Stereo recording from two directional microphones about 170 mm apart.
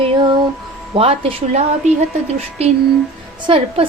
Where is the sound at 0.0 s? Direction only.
25° right (ahead or behind).